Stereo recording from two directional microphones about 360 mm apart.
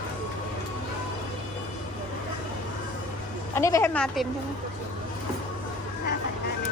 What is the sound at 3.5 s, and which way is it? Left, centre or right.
Speech, centre.